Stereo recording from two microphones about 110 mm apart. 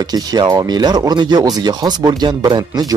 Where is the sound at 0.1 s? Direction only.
35° right (ahead or behind).